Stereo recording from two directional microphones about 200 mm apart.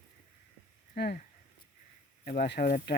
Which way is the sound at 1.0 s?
55° left (ahead or behind).